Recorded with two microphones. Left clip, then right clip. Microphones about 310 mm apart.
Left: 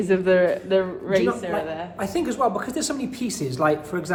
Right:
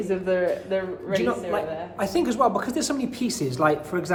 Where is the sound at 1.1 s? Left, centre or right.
Centre.